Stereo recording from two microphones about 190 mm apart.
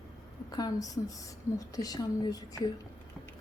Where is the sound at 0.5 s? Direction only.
20° left (ahead or behind).